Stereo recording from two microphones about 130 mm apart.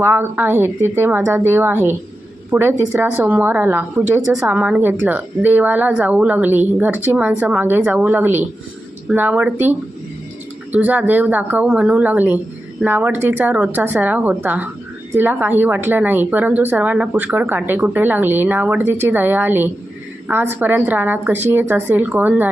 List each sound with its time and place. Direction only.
0.0 s a woman's voice: 15° right (ahead or behind)